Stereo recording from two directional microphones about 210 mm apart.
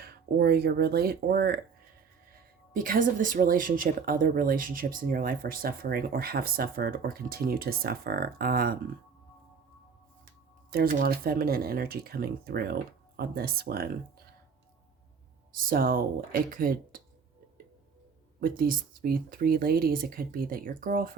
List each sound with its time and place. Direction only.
0.0 s speech: 50° right (ahead or behind)
2.7 s speech: 40° right (ahead or behind)
10.7 s speech: 45° right (ahead or behind)
15.5 s speech: 45° right (ahead or behind)
18.3 s speech: 40° right (ahead or behind)